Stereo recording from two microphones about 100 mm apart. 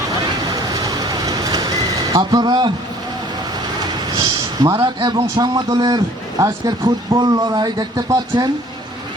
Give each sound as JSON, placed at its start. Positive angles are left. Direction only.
{"t": 0.7, "sound": "vehicle", "side_deg": -40}
{"t": 3.8, "sound": "a sound", "side_deg": -45}
{"t": 4.9, "sound": "speech", "side_deg": -50}